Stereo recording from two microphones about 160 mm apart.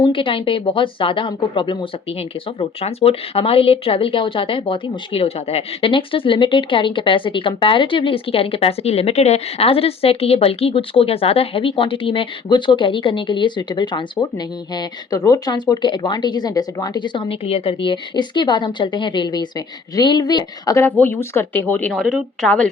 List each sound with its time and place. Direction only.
0.0 s speech: 35° left (ahead or behind); by 21.9 s 10° left (ahead or behind)
21.9 s a woman's voice: centre (ahead or behind)